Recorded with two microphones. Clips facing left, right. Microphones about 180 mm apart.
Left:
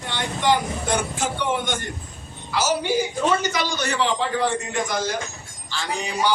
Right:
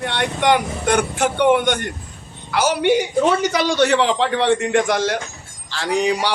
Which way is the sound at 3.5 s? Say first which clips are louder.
Right 9 dB; 90° right.